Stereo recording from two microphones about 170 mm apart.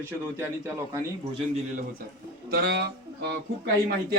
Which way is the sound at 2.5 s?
65° right (ahead or behind).